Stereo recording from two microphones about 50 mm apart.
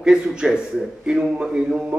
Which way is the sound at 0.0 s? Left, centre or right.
Centre.